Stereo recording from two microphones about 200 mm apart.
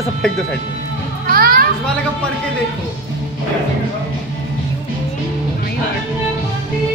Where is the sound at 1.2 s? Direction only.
45° right (ahead or behind).